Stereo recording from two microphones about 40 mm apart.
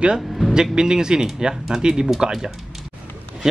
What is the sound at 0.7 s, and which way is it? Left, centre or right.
Speech, centre.